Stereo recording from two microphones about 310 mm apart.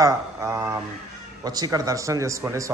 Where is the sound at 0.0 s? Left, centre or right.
Centre.